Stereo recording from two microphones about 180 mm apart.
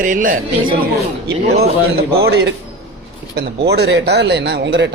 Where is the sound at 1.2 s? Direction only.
60° right (ahead or behind).